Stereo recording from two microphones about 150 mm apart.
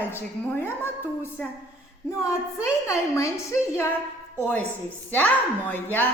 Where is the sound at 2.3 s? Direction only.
20° left (ahead or behind).